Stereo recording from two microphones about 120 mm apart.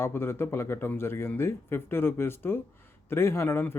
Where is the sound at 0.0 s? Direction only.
20° left (ahead or behind).